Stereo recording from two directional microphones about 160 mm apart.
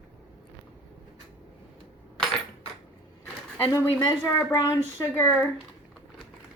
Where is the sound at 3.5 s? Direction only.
10° left (ahead or behind).